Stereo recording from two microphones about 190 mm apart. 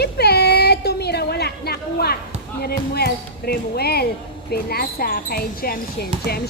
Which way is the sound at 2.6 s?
55° left (ahead or behind).